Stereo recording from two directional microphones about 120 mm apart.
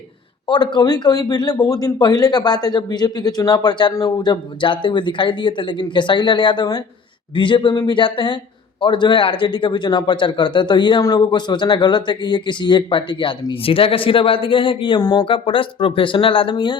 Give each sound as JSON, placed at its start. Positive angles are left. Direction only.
{"t": 0.4, "sound": "speech", "side_deg": 40}